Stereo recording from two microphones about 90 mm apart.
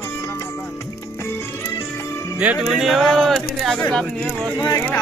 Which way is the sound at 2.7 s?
Centre (ahead or behind).